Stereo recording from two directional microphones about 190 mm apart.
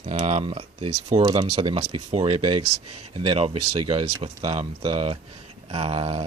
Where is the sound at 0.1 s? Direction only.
35° right (ahead or behind).